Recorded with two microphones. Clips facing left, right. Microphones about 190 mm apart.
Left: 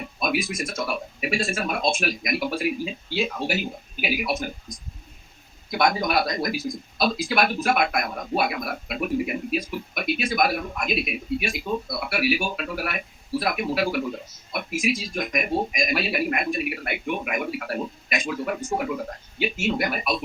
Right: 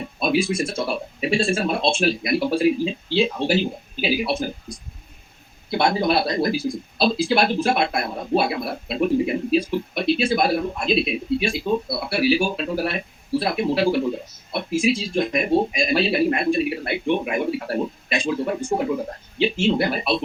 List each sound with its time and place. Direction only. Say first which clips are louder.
0.0 s a man's voice: right 5 dB; 30° right (ahead or behind)